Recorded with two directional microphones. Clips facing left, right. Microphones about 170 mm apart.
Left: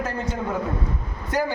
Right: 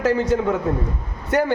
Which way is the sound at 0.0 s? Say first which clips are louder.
Right 10 dB; 80° right.